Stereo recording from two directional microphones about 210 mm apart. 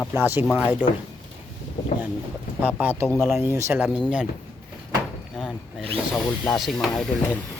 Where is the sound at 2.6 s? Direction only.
5° right (ahead or behind).